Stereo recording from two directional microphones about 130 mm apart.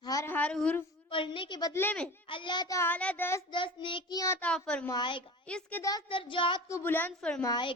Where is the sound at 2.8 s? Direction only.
10° left (ahead or behind).